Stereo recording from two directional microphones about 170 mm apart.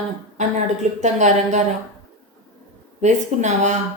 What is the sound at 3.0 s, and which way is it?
Speech, 45° right (ahead or behind).